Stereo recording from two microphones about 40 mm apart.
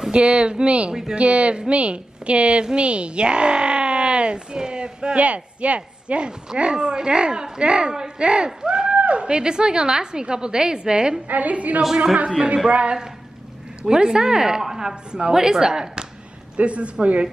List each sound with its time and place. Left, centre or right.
0.1 s a woman's voice: right
8.6 s a sound: right
8.9 s a sound: right
9.4 s speech: centre
11.2 s a woman's voice: right
13.8 s a woman's voice: centre
16.5 s a woman's voice: right